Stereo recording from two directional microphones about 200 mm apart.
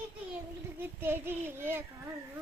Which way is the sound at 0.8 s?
10° right (ahead or behind).